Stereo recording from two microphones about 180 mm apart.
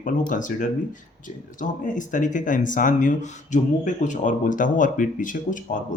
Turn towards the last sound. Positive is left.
turn(degrees=45)  # may be behind; listen again after turning